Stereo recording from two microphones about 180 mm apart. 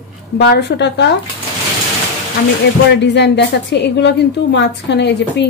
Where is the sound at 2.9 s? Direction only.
75° left (ahead or behind).